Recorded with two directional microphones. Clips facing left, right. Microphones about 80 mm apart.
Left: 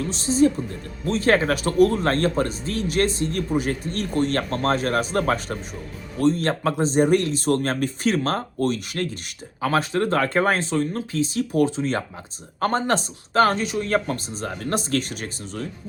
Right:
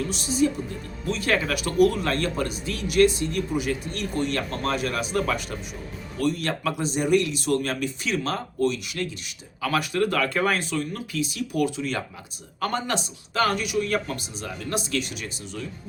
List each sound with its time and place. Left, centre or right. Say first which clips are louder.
0.1 s speech: left 8 dB; left
9.6 s speech: left 2 dB; left